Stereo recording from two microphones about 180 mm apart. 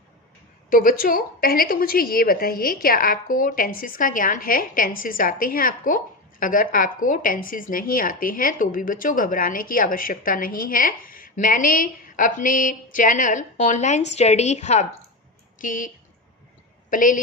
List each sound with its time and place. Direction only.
0.7 s speech: 50° left (ahead or behind)
16.9 s speech: 50° left (ahead or behind)